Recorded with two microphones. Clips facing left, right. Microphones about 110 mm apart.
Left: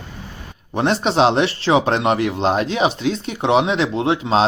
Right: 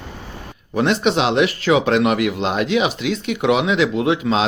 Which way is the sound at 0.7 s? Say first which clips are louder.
Even; 35° left (ahead or behind).